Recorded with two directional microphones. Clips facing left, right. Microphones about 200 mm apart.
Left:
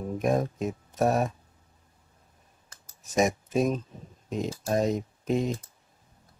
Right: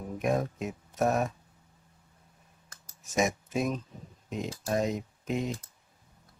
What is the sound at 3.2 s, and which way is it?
Speech, 35° left (ahead or behind).